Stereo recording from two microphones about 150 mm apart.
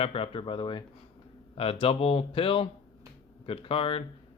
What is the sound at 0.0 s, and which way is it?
Speech, 40° left (ahead or behind).